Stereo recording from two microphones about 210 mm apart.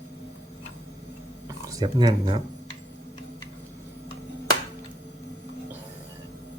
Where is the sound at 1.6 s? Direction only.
20° right (ahead or behind).